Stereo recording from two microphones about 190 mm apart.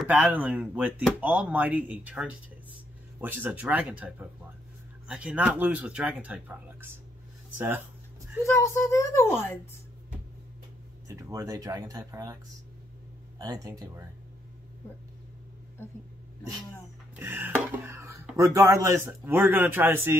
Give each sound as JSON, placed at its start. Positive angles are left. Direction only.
{"t": 0.0, "sound": "speech", "side_deg": -10}
{"t": 8.5, "sound": "a woman's voice", "side_deg": 15}
{"t": 11.1, "sound": "speech", "side_deg": -15}
{"t": 13.4, "sound": "speech", "side_deg": -20}
{"t": 17.1, "sound": "a sound", "side_deg": -10}
{"t": 18.3, "sound": "speech", "side_deg": -15}